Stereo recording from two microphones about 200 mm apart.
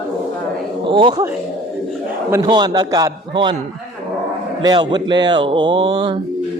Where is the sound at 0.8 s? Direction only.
25° right (ahead or behind).